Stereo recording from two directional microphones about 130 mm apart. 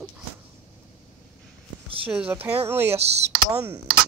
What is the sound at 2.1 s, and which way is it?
Speech, 10° right (ahead or behind).